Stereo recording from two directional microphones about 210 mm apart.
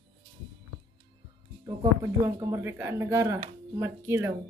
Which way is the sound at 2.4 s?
10° right (ahead or behind).